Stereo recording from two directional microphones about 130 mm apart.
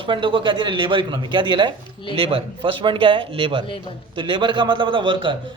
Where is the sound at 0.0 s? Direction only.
40° right (ahead or behind).